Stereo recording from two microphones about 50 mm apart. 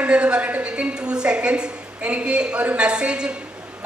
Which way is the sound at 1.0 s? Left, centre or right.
Centre.